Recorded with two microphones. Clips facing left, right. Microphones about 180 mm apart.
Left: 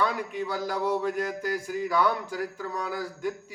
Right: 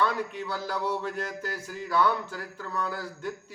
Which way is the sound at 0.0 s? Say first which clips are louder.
Even; 10° left (ahead or behind).